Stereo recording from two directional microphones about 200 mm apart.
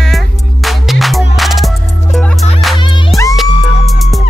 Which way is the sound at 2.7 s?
25° left (ahead or behind).